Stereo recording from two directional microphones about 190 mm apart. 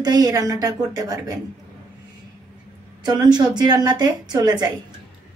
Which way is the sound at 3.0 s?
20° right (ahead or behind).